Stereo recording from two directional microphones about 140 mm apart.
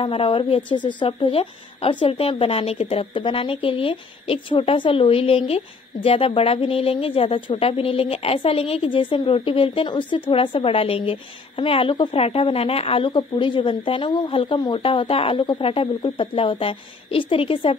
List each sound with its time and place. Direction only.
0.0 s a woman's voice: 40° left (ahead or behind)